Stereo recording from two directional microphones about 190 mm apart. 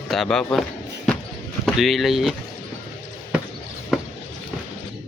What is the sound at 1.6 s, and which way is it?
Speech, centre (ahead or behind).